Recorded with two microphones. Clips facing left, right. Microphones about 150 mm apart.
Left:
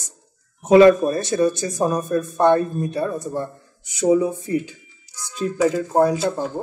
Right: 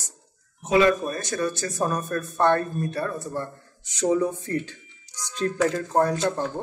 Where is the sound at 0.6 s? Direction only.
40° left (ahead or behind).